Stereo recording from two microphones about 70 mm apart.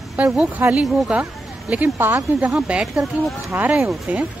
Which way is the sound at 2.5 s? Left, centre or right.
Centre.